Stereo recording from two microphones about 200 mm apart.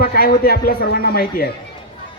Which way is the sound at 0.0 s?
50° left (ahead or behind).